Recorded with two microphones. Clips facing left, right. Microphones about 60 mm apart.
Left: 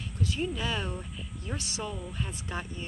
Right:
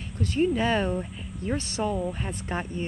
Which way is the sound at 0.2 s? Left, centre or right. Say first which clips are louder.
Right 8 dB; right.